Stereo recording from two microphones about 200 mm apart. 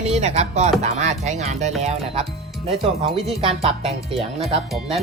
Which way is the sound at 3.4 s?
30° right (ahead or behind).